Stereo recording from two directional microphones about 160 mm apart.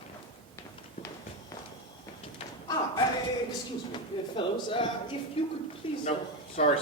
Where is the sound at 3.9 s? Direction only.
30° left (ahead or behind).